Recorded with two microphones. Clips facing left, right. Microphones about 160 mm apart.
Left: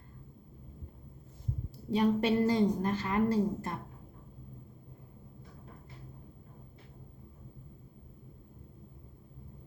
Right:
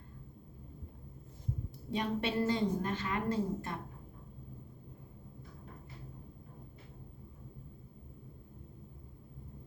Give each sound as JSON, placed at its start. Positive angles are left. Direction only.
{"t": 2.0, "sound": "a woman's voice", "side_deg": 40}